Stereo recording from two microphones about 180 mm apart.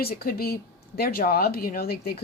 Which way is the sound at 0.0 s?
60° left (ahead or behind).